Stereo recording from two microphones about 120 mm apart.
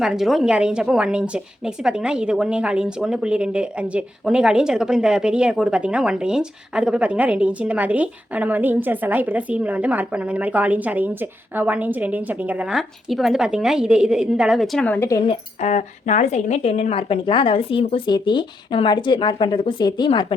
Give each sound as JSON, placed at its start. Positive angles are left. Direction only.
{"t": 0.0, "sound": "speech", "side_deg": -5}
{"t": 14.8, "sound": "speech", "side_deg": 20}
{"t": 15.6, "sound": "a woman's voice", "side_deg": 80}